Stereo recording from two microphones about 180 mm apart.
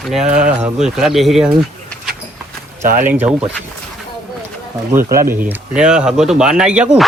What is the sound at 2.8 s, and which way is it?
Speech, 45° right (ahead or behind).